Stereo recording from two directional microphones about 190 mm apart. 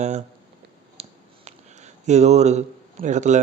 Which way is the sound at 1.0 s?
35° right (ahead or behind).